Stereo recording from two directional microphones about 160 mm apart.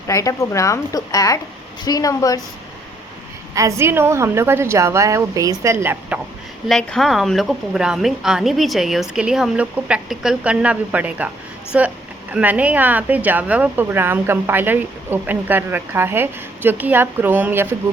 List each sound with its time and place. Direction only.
0.1 s a woman's voice: 20° left (ahead or behind)
3.5 s speech: 20° right (ahead or behind)
6.7 s a woman's voice: centre (ahead or behind)